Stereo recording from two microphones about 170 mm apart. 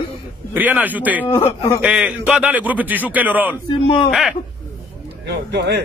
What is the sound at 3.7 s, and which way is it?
Speech, 30° left (ahead or behind).